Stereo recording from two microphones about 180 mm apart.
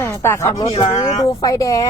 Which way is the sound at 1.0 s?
20° left (ahead or behind).